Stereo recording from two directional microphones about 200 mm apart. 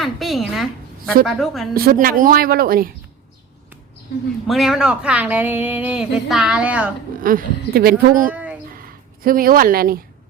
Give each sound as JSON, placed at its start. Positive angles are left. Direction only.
{"t": 0.0, "sound": "a sound", "side_deg": 0}
{"t": 1.2, "sound": "speech", "side_deg": 0}
{"t": 1.7, "sound": "a woman's voice", "side_deg": -45}
{"t": 4.4, "sound": "speech", "side_deg": 0}
{"t": 7.2, "sound": "a woman's voice", "side_deg": -45}
{"t": 8.3, "sound": "a sound", "side_deg": -5}
{"t": 8.8, "sound": "speech", "side_deg": -45}